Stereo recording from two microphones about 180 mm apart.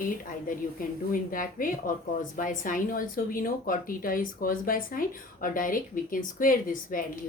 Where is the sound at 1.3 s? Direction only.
50° left (ahead or behind).